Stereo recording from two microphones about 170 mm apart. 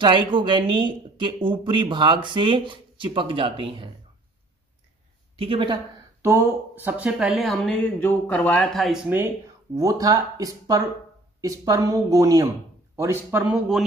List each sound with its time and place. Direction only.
0.0 s speech: 30° right (ahead or behind)
5.4 s speech: 30° right (ahead or behind)
6.2 s a man's voice: 15° right (ahead or behind)
9.8 s speech: 20° right (ahead or behind); by 13.8 s 5° right (ahead or behind)